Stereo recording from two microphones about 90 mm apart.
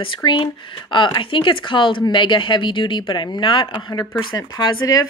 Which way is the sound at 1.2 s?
70° left (ahead or behind).